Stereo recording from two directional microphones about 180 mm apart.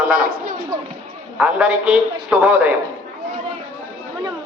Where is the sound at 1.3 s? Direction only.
5° right (ahead or behind).